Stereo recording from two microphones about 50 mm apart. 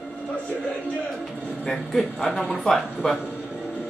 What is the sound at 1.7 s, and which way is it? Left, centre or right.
Speech, centre.